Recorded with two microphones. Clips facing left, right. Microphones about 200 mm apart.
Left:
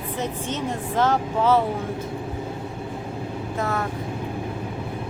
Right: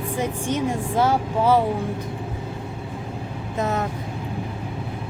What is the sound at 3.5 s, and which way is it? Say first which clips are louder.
Speech: right 3 dB; 20° right (ahead or behind).